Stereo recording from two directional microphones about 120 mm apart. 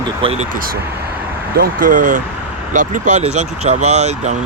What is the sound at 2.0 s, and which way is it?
Speech, 90° right.